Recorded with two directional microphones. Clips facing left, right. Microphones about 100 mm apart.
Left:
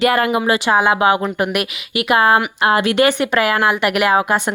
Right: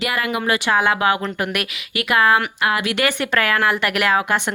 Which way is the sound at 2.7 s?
30° left (ahead or behind).